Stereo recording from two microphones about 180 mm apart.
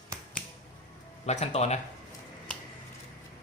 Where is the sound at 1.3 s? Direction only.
35° left (ahead or behind).